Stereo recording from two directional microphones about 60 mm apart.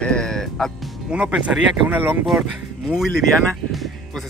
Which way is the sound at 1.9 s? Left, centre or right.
Right.